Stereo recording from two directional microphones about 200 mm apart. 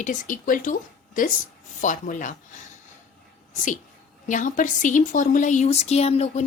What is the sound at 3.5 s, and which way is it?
A woman's voice, 40° left (ahead or behind).